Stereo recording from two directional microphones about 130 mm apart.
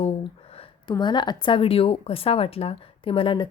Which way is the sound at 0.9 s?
35° left (ahead or behind).